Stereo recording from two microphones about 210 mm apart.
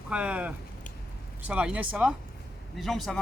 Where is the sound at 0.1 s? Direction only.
5° right (ahead or behind).